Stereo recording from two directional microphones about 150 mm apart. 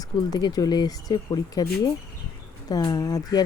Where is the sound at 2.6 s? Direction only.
25° left (ahead or behind).